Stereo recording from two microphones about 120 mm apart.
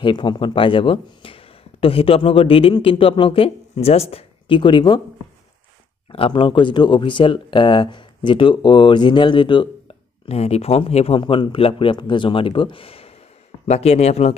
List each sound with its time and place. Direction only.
0.0 s speech: 40° left (ahead or behind)
6.1 s speech: 45° left (ahead or behind)
11.1 s speech: 45° left (ahead or behind); by 14.3 s 65° left (ahead or behind)